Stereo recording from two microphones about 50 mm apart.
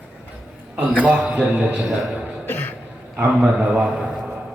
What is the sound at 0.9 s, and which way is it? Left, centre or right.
Speech, right.